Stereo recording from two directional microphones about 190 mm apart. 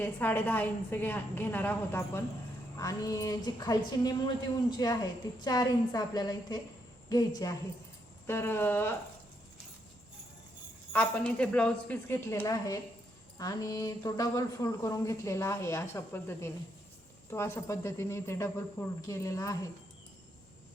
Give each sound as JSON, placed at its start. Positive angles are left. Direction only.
{"t": 0.0, "sound": "a woman's voice", "side_deg": 10}
{"t": 10.9, "sound": "speech", "side_deg": 10}